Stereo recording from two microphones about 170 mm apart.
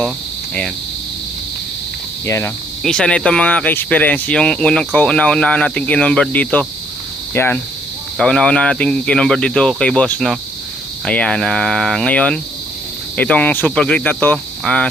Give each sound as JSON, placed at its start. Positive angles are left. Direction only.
{"t": 2.2, "sound": "speech", "side_deg": 15}
{"t": 2.8, "sound": "speech", "side_deg": 5}